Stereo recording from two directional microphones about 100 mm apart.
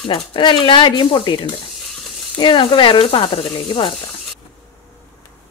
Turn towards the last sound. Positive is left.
turn(degrees=65)  # may be behind; listen again after turning